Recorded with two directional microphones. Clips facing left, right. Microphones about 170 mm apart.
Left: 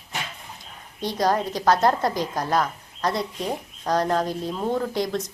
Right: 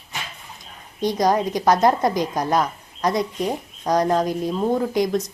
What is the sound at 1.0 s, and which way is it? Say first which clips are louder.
A woman's voice: right 4 dB; 15° right (ahead or behind).